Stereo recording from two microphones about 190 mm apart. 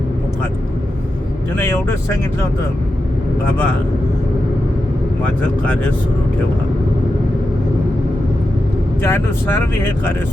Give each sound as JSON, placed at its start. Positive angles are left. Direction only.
{"t": 1.5, "sound": "speech", "side_deg": 15}
{"t": 9.0, "sound": "speech", "side_deg": 10}